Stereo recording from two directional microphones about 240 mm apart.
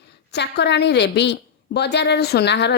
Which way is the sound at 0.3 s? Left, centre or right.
Left.